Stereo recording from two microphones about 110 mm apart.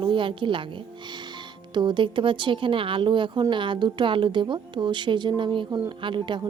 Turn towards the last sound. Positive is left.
turn(degrees=-45)  # may be behind; listen again after turning